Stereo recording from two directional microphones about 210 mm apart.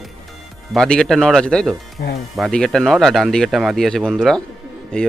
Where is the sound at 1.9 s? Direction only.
45° left (ahead or behind).